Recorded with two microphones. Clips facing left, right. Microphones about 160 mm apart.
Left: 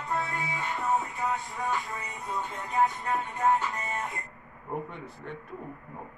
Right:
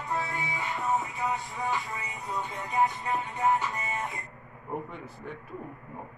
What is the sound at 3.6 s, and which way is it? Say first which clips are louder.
Music: even; 20° right (ahead or behind).